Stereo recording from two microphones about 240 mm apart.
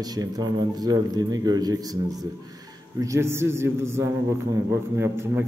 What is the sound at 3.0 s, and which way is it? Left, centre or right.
Speech, centre.